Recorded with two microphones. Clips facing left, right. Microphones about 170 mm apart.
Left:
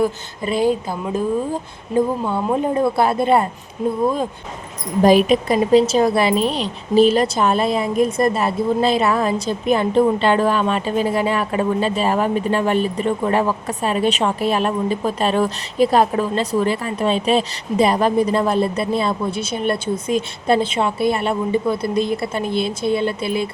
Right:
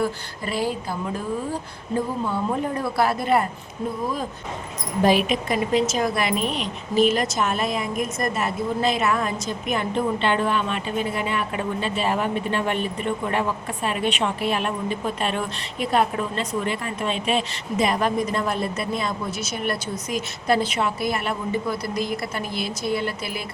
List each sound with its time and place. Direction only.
0.0 s speech: 20° left (ahead or behind)
2.3 s speech: 25° left (ahead or behind)
5.0 s a woman's voice: 40° left (ahead or behind)